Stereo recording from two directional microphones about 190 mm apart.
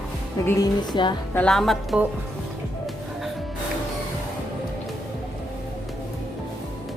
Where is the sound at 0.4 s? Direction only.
20° left (ahead or behind).